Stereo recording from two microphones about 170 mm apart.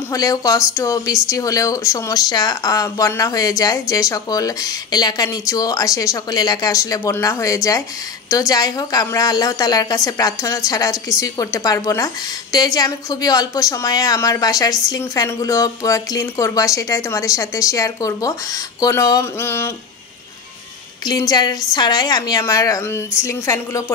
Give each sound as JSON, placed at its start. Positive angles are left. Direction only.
{"t": 0.1, "sound": "speech", "side_deg": 20}
{"t": 21.0, "sound": "speech", "side_deg": 25}